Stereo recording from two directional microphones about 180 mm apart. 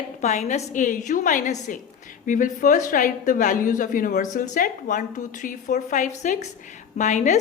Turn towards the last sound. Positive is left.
turn(degrees=40)  # may be behind; listen again after turning